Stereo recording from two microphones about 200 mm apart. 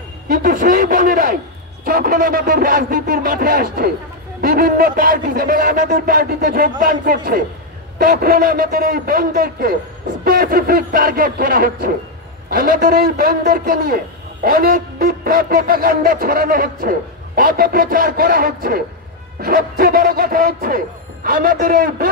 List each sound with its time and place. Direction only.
0.3 s a man's voice: 45° right (ahead or behind)